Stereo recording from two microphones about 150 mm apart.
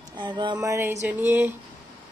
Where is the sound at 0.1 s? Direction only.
30° right (ahead or behind).